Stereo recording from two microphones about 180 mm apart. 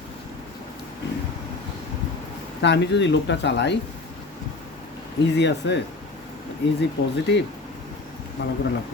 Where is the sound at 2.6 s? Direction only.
75° left (ahead or behind).